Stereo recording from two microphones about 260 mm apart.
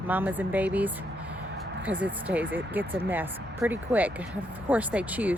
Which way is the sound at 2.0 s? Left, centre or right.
Centre.